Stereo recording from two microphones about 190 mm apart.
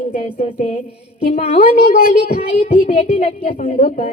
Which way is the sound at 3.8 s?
50° left (ahead or behind).